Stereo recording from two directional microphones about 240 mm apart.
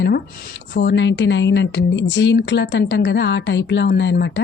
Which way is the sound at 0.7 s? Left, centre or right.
Left.